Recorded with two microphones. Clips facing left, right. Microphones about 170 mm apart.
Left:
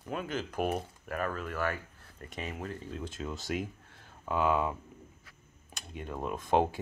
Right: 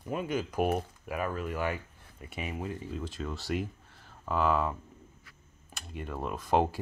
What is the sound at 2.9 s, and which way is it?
Speech, centre (ahead or behind).